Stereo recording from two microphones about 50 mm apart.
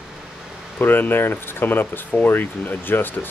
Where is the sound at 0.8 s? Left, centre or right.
Left.